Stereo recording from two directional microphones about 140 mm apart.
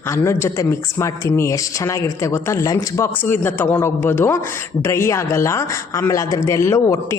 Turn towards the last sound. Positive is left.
turn(degrees=20)  # may be behind; listen again after turning